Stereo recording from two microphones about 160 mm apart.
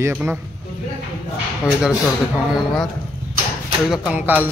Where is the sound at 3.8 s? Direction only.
5° right (ahead or behind).